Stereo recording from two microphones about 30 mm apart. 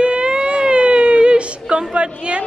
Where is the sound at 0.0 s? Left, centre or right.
Right.